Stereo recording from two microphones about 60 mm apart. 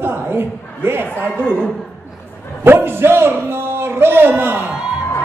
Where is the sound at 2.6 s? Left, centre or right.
Right.